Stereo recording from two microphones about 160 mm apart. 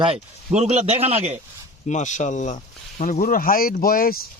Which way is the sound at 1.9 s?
50° left (ahead or behind).